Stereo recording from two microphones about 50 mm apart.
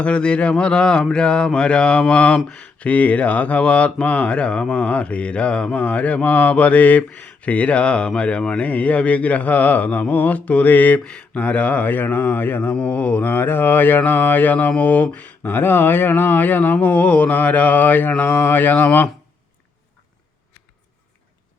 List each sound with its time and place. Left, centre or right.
0.0 s mantra: left
8.6 s speech: left
11.0 s speech: centre
11.3 s speech: left
12.7 s mantra: left
13.2 s speech: left